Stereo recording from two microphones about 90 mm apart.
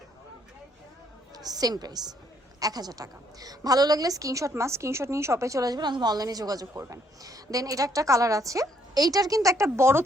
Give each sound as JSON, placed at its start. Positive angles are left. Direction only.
{"t": 1.4, "sound": "a woman's voice", "side_deg": -45}